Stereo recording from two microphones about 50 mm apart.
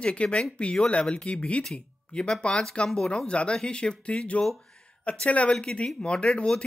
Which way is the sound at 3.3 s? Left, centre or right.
Left.